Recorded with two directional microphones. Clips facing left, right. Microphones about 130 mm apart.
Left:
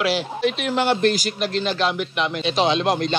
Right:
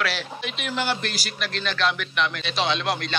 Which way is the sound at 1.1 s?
20° left (ahead or behind).